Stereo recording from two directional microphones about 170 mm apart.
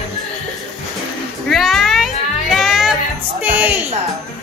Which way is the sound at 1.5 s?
Centre (ahead or behind).